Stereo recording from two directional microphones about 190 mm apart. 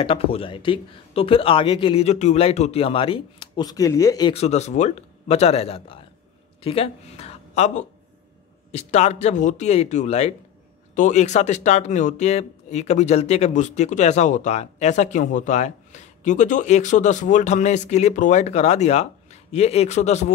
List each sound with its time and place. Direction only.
0.0 s speech: 30° left (ahead or behind)
4.3 s speech: 35° left (ahead or behind)